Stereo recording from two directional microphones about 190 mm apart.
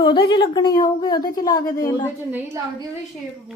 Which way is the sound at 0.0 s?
25° left (ahead or behind).